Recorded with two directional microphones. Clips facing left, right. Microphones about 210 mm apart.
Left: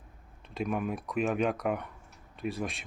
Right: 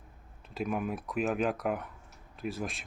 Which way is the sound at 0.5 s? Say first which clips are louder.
Left 1 dB; centre (ahead or behind).